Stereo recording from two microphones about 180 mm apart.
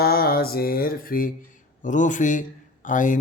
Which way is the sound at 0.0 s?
60° left (ahead or behind).